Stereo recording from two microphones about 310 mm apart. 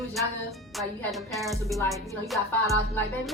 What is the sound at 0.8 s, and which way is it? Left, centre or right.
A woman's voice, centre.